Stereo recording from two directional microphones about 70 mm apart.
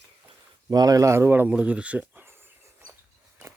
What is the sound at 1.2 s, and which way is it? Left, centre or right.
Speech, right.